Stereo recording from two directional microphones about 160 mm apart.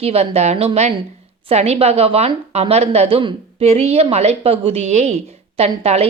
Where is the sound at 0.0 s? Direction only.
40° right (ahead or behind).